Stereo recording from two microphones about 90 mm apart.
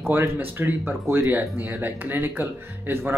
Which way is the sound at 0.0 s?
25° right (ahead or behind).